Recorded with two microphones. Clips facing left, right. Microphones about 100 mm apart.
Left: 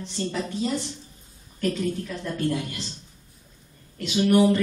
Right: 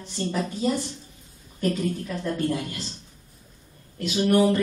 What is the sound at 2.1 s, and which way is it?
Speech, 5° right (ahead or behind).